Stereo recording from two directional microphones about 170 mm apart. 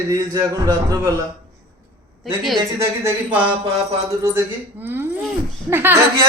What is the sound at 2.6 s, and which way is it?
Speech, 15° right (ahead or behind).